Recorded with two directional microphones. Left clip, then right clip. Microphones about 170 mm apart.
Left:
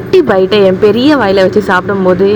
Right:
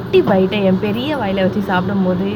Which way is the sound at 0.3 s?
65° left (ahead or behind).